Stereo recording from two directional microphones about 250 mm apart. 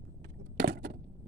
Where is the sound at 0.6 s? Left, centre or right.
Right.